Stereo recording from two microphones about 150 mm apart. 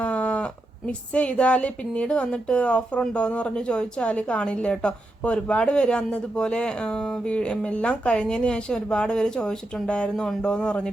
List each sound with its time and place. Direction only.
0.0 s speech: 10° left (ahead or behind)